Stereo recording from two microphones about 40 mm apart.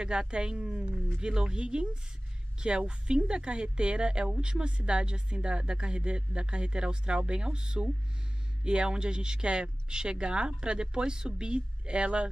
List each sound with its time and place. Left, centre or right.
0.0 s speech: centre